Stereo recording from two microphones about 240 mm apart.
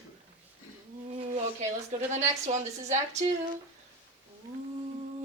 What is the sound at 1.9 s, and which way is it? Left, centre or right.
Speech, right.